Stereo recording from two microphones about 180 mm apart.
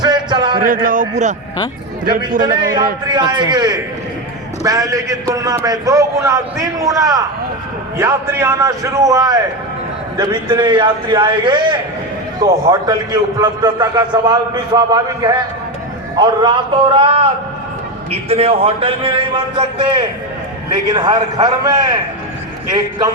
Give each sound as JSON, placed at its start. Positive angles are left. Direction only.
{"t": 0.0, "sound": "music", "side_deg": -25}
{"t": 0.6, "sound": "a man's voice", "side_deg": -50}
{"t": 2.4, "sound": "a man's voice", "side_deg": -25}